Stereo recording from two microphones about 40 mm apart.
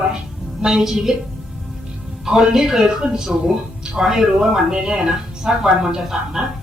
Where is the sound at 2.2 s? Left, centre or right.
Centre.